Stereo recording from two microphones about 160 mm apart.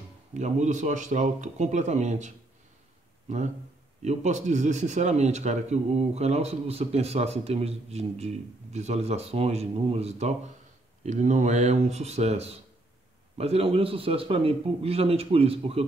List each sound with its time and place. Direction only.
0.4 s a man's voice: 50° right (ahead or behind)